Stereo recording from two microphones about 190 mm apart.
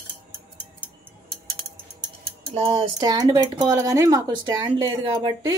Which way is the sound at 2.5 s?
30° right (ahead or behind).